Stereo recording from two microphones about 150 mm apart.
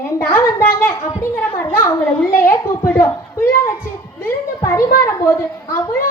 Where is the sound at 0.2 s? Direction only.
10° left (ahead or behind).